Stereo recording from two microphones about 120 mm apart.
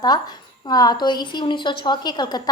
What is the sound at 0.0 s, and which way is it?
A woman's voice, 35° left (ahead or behind).